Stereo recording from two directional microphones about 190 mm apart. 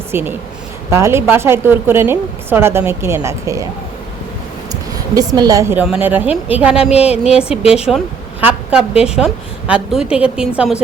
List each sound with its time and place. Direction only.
0.1 s speech: 10° right (ahead or behind)
4.7 s speech: 20° right (ahead or behind)
6.9 s a woman's voice: 35° left (ahead or behind)
7.3 s a woman's voice: 5° right (ahead or behind)